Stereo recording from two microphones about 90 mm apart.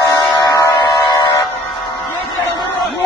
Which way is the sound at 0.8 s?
55° left (ahead or behind).